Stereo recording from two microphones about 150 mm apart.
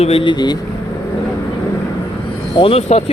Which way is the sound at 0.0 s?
40° left (ahead or behind).